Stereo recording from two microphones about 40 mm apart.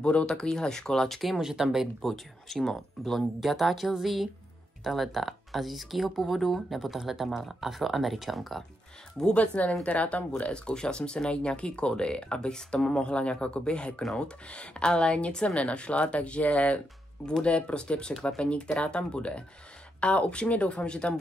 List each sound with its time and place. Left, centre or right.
0.0 s speech: left
0.3 s speech: centre
1.4 s speech: centre
2.0 s speech: centre
7.2 s speech: centre
9.3 s speech: left
10.5 s speech: left